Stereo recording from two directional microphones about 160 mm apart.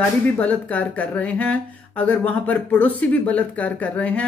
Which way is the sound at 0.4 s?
10° left (ahead or behind).